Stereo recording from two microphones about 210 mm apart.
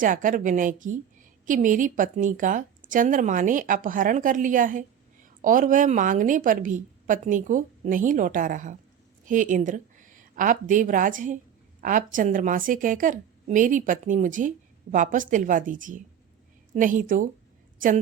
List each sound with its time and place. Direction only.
0.0 s a woman's voice: 40° right (ahead or behind)